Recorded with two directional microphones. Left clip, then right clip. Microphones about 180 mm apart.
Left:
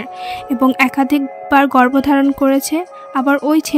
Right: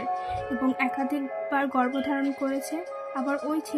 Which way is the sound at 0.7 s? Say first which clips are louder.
Left 13 dB; 65° left (ahead or behind).